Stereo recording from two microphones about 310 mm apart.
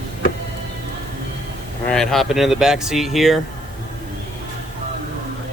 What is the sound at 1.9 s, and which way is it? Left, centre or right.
Speech, centre.